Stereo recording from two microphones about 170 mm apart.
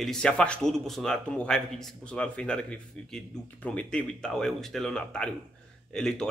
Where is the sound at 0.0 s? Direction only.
5° left (ahead or behind).